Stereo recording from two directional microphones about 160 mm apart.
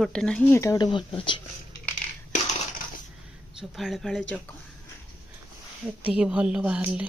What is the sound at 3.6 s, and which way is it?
Speech, centre (ahead or behind).